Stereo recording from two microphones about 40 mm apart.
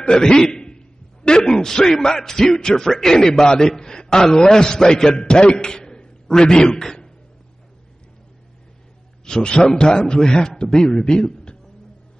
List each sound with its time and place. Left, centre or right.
0.2 s a man's voice: centre
5.9 s a sound: centre
9.2 s a man's voice: left